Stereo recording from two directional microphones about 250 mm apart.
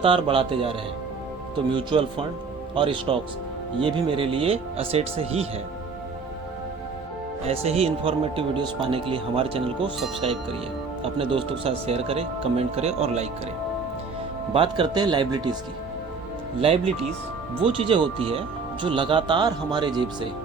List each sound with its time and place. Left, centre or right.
0.0 s speech: right
7.4 s speech: right
14.5 s speech: right
16.6 s speech: right